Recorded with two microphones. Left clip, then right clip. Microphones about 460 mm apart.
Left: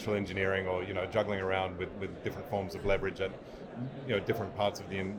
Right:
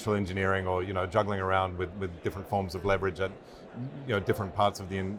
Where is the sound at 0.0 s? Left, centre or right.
Right.